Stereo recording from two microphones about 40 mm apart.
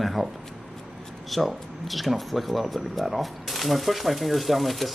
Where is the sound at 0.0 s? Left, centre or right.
Centre.